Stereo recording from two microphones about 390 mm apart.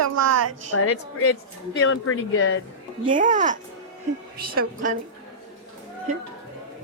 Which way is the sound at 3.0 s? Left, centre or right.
Centre.